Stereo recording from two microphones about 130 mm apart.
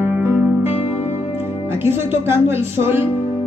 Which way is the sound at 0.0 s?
15° right (ahead or behind).